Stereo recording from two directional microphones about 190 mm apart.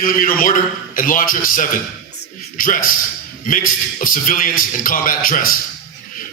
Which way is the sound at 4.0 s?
45° left (ahead or behind).